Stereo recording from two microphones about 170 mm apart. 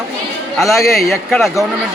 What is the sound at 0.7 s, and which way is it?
Speech, 20° left (ahead or behind).